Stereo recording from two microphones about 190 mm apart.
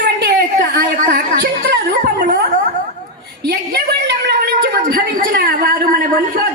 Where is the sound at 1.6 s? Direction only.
60° right (ahead or behind).